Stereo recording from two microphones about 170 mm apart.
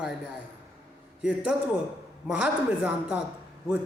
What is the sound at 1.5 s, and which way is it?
A man's voice, 5° right (ahead or behind).